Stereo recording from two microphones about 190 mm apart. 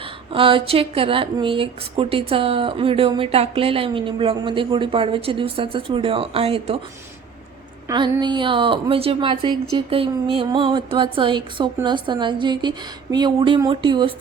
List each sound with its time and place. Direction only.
0.3 s speech: 30° right (ahead or behind)
7.9 s speech: 25° right (ahead or behind)